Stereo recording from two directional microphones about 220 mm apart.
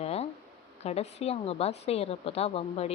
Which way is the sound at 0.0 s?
30° left (ahead or behind).